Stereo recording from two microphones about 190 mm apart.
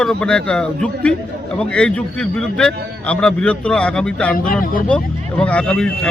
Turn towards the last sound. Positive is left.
turn(degrees=5)  # may be behind; listen again after turning